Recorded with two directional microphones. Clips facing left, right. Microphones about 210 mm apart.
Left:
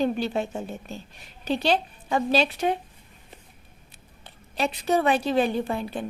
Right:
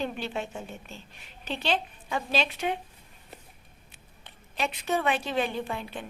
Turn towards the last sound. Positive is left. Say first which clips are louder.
# left 6 dB
turn(degrees=40)  # may be behind; listen again after turning